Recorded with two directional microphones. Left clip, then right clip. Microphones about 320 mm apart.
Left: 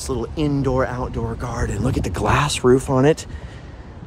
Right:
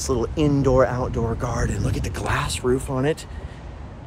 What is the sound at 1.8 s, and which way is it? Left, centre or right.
Speech, left.